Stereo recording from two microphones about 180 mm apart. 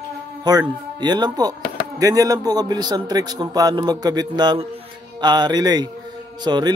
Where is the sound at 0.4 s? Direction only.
20° right (ahead or behind).